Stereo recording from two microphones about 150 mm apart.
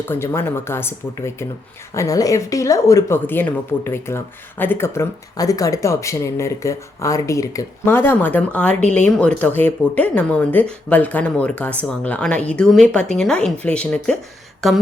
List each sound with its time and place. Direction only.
0.1 s a woman's voice: 15° left (ahead or behind)
8.8 s speech: 50° left (ahead or behind)
9.0 s speech: 5° left (ahead or behind)
14.6 s a sound: centre (ahead or behind)